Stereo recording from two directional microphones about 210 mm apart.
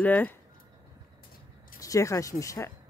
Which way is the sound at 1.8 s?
15° left (ahead or behind).